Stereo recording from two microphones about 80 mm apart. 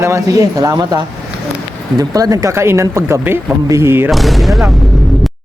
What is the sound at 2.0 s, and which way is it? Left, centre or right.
Speech, right.